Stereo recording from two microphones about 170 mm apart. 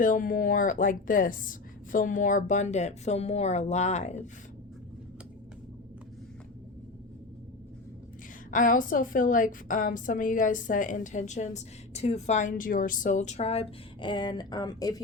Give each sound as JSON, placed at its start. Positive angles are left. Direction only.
{"t": 0.0, "sound": "a woman's voice", "side_deg": 50}
{"t": 8.4, "sound": "a woman's voice", "side_deg": 50}